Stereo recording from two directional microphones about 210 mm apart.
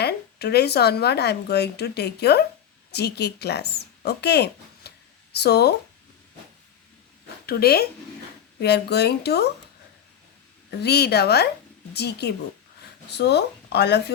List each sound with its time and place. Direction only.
0.0 s speech: 50° left (ahead or behind)
7.4 s speech: 50° left (ahead or behind)
10.7 s speech: 50° left (ahead or behind)